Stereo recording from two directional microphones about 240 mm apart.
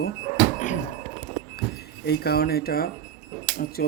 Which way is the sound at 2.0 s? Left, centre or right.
Left.